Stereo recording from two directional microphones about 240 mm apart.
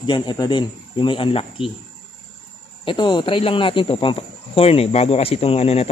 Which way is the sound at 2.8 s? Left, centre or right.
Centre.